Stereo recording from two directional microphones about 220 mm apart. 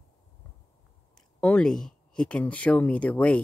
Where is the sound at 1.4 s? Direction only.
5° left (ahead or behind).